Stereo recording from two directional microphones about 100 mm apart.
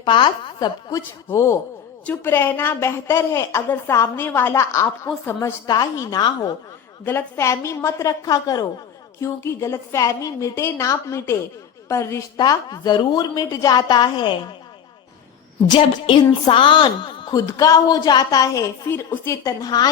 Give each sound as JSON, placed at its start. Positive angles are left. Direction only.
{"t": 0.0, "sound": "speech", "side_deg": 50}
{"t": 1.3, "sound": "a woman's voice", "side_deg": 25}
{"t": 5.6, "sound": "a woman's voice", "side_deg": 40}
{"t": 7.0, "sound": "a woman's voice", "side_deg": 25}
{"t": 9.2, "sound": "a woman's voice", "side_deg": 30}
{"t": 12.4, "sound": "a woman's voice", "side_deg": 40}
{"t": 16.5, "sound": "a woman's voice", "side_deg": 60}
{"t": 18.9, "sound": "a woman's voice", "side_deg": 20}